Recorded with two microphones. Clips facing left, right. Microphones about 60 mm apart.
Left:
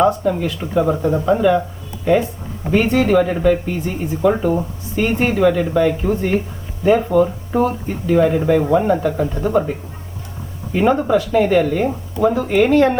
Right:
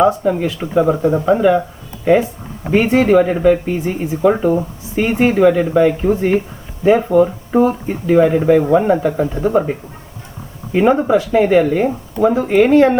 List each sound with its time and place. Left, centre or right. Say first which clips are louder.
0.0 s speech: right 2 dB; centre
10.8 s speech: right 3 dB; centre